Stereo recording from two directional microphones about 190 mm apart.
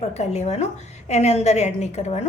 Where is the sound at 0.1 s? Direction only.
35° left (ahead or behind).